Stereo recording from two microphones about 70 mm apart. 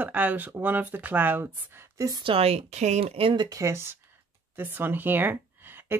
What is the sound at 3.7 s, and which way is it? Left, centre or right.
Speech, right.